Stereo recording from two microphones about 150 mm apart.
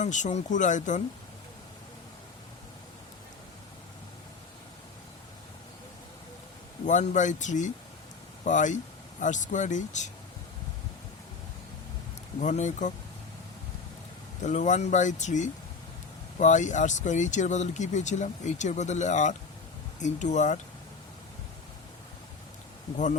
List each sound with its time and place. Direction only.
0.0 s speech: 55° left (ahead or behind)
6.8 s speech: 55° left (ahead or behind)
12.4 s speech: 55° left (ahead or behind)
14.4 s speech: 55° left (ahead or behind)